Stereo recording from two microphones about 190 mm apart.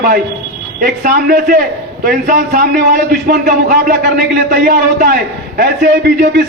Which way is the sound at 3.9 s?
55° right (ahead or behind).